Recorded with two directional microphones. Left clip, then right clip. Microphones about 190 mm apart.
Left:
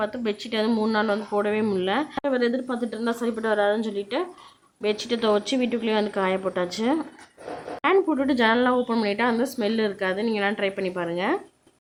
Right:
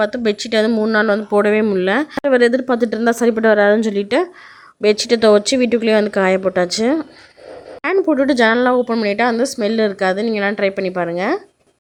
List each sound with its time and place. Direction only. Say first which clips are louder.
0.0 s a woman's voice: right 10 dB; 30° right (ahead or behind)